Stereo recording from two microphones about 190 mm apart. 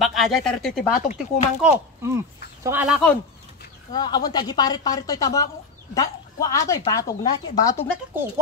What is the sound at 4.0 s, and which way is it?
A woman's voice, 20° left (ahead or behind).